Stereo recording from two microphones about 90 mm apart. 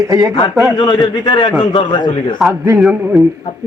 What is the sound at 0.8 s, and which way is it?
A man's voice, 55° left (ahead or behind).